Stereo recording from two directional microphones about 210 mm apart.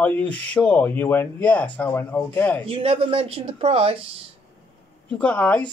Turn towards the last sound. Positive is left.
turn(degrees=5)  # may be behind; listen again after turning